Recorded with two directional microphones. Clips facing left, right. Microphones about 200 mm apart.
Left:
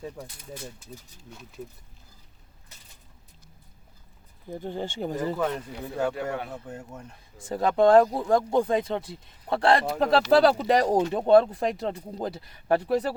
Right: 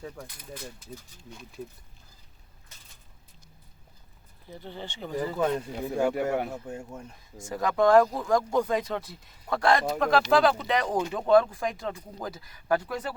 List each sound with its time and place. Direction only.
0.0 s speech: 10° left (ahead or behind)
4.4 s speech: 50° left (ahead or behind)
5.4 s speech: 10° right (ahead or behind)
7.3 s speech: 30° left (ahead or behind)